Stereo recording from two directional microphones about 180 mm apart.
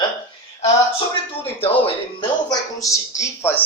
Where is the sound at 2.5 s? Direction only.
20° left (ahead or behind).